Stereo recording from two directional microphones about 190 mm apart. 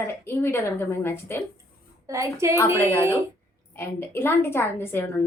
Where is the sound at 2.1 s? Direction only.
15° right (ahead or behind).